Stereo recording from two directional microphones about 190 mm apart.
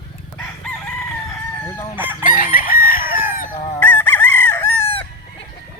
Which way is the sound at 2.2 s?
50° left (ahead or behind).